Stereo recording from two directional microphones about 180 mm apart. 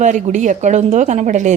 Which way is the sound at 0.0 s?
45° right (ahead or behind).